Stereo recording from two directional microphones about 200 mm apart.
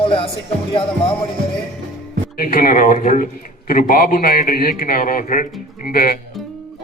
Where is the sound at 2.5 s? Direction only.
45° left (ahead or behind).